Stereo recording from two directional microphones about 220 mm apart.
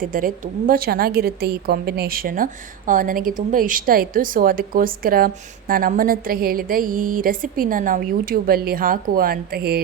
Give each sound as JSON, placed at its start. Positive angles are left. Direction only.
{"t": 0.0, "sound": "a woman's voice", "side_deg": -40}